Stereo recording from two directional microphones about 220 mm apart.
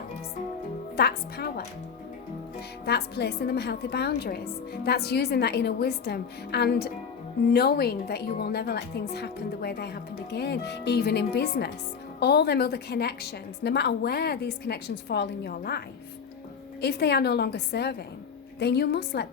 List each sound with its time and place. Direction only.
0.9 s a woman's voice: 45° left (ahead or behind)
2.8 s a woman's voice: 50° left (ahead or behind)
16.8 s a woman's voice: 50° left (ahead or behind)